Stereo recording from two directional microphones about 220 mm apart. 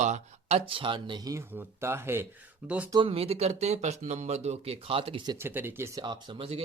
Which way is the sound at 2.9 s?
25° right (ahead or behind).